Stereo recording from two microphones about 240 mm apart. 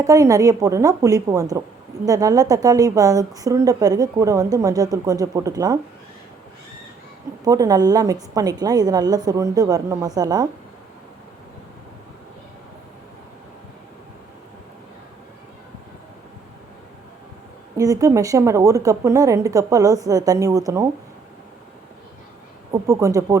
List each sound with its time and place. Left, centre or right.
0.0 s a woman's voice: centre
7.4 s a woman's voice: centre
17.7 s a woman's voice: centre
22.7 s a woman's voice: centre